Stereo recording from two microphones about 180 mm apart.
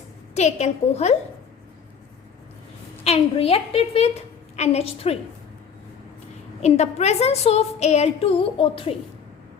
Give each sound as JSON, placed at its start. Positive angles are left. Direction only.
{"t": 0.3, "sound": "a woman's voice", "side_deg": 35}
{"t": 3.0, "sound": "a woman's voice", "side_deg": 35}
{"t": 6.6, "sound": "a woman's voice", "side_deg": 35}